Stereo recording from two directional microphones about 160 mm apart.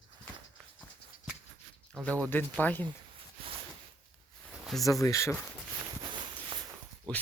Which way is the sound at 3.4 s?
35° right (ahead or behind).